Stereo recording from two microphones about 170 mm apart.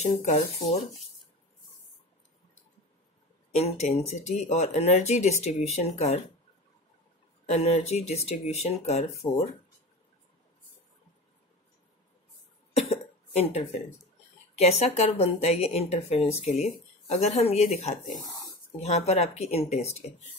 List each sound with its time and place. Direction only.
0.0 s speech: 45° left (ahead or behind)
3.5 s speech: 40° left (ahead or behind)
7.4 s speech: 40° left (ahead or behind)
13.3 s speech: 40° left (ahead or behind)